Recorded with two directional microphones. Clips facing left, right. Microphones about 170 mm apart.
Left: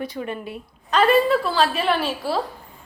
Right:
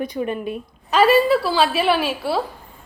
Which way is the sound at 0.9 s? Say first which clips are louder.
Right 2 dB; 5° right (ahead or behind).